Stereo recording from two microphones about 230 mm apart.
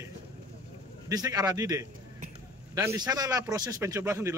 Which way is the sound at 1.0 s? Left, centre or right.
Centre.